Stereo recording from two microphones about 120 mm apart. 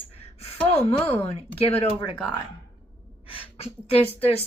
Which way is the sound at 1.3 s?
55° left (ahead or behind).